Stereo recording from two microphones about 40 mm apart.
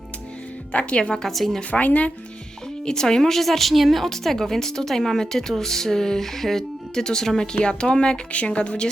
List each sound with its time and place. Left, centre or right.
0.7 s speech: left
1.1 s a woman's voice: centre
1.7 s speech: left
2.8 s a woman's voice: centre